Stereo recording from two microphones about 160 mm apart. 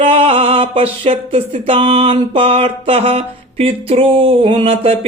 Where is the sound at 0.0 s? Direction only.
35° right (ahead or behind).